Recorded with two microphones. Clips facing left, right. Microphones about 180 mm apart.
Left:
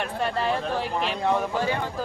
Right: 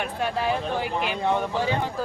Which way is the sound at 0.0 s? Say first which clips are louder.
Even; 5° right (ahead or behind).